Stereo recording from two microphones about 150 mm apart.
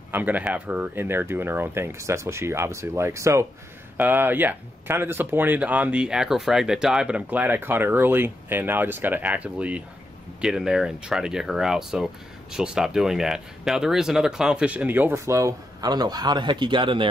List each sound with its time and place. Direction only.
0.1 s speech: 10° right (ahead or behind); by 17.1 s 35° right (ahead or behind)